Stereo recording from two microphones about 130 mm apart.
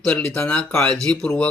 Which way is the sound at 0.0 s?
10° left (ahead or behind).